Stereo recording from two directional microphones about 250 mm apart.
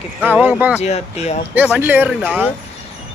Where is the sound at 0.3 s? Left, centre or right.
Centre.